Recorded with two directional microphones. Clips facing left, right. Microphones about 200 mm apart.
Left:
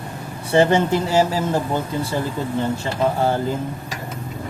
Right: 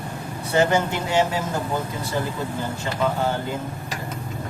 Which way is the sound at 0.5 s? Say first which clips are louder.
Left 4 dB; 30° left (ahead or behind).